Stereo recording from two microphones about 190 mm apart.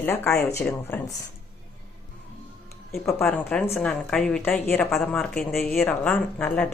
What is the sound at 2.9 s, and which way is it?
A woman's voice, centre (ahead or behind).